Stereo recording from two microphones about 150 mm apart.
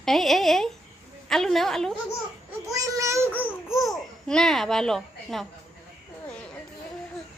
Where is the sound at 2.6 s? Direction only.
20° right (ahead or behind).